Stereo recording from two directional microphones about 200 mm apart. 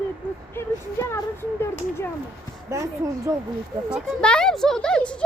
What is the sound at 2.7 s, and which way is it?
Speech, 15° right (ahead or behind).